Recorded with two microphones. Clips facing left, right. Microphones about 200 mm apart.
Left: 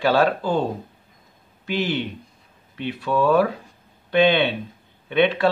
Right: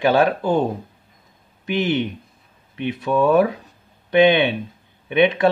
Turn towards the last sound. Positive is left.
turn(degrees=-15)  # may be behind; listen again after turning